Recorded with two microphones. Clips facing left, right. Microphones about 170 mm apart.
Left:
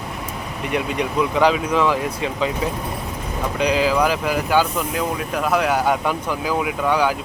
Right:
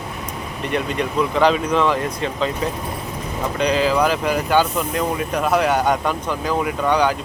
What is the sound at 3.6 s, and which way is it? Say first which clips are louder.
Speech: even; 10° left (ahead or behind).